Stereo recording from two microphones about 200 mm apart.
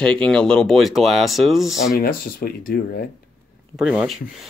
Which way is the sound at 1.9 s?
45° left (ahead or behind).